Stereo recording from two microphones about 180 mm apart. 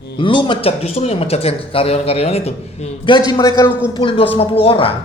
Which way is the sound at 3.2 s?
25° left (ahead or behind).